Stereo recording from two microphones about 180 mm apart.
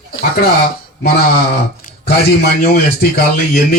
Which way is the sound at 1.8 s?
65° left (ahead or behind).